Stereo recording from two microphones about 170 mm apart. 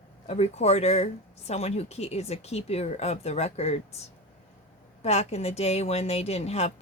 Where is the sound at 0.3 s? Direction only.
40° left (ahead or behind).